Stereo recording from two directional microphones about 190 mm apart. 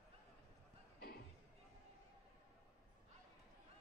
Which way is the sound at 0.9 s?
55° left (ahead or behind).